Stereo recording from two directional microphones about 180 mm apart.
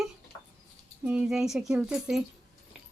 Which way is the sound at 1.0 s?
5° right (ahead or behind).